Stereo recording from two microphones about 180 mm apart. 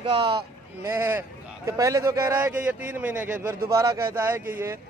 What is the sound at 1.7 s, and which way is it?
A man's voice, 15° right (ahead or behind).